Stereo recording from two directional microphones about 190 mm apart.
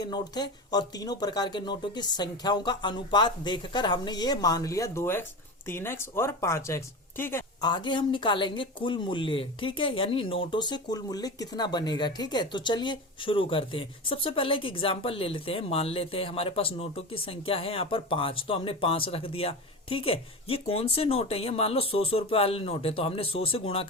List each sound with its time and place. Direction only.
0.0 s speech: 20° left (ahead or behind)